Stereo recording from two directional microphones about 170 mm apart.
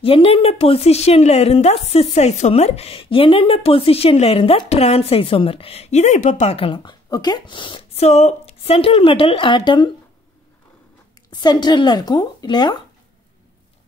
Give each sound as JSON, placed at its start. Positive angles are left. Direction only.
{"t": 0.0, "sound": "a woman's voice", "side_deg": 35}
{"t": 11.2, "sound": "speech", "side_deg": 25}